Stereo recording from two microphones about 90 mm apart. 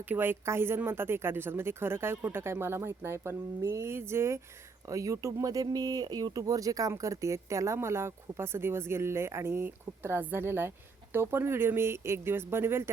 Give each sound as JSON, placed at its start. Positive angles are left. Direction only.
{"t": 0.0, "sound": "speech", "side_deg": -20}